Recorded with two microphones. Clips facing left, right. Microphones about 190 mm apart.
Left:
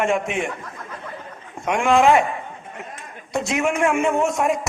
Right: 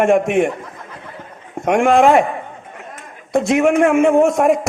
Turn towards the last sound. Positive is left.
turn(degrees=-55)  # may be behind; listen again after turning